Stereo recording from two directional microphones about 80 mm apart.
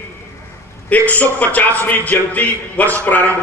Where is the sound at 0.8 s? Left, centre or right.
Left.